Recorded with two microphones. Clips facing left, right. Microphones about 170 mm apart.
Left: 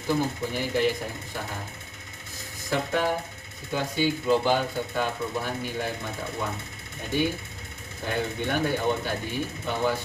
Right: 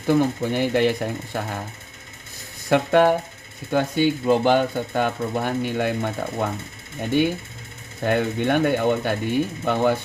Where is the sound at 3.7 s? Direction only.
55° right (ahead or behind).